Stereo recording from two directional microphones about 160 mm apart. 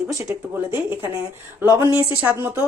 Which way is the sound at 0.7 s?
15° right (ahead or behind).